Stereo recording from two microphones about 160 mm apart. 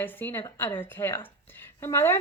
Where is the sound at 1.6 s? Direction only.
15° left (ahead or behind).